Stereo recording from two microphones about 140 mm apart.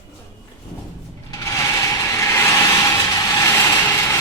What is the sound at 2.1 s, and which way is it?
Vehicle, 20° left (ahead or behind).